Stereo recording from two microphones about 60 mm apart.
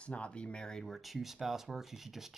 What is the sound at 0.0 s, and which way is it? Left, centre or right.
Speech, centre.